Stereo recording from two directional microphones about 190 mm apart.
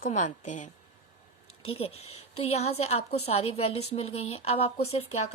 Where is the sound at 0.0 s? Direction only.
40° left (ahead or behind).